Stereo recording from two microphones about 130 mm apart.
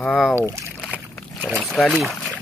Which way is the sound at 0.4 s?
20° right (ahead or behind).